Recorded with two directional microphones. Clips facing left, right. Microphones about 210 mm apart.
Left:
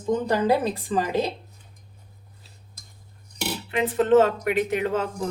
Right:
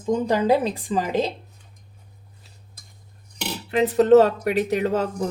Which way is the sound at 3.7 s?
40° right (ahead or behind).